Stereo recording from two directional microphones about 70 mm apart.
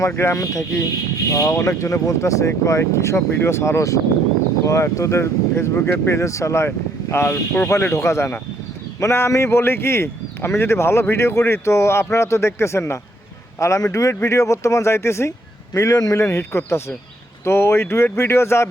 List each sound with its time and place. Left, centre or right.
0.2 s speech: left
7.9 s speech: left
15.7 s speech: left
16.1 s speech: left